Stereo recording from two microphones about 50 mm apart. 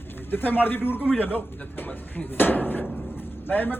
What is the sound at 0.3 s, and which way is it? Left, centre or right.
Speech, left.